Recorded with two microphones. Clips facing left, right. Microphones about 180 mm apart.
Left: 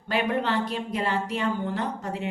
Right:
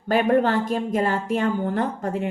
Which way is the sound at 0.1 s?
45° right (ahead or behind).